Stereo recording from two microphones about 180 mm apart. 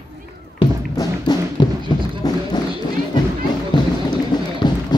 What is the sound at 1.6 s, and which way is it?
Beatboxing, 25° left (ahead or behind).